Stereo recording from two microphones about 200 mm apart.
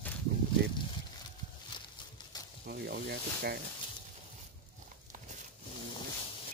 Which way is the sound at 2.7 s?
55° right (ahead or behind).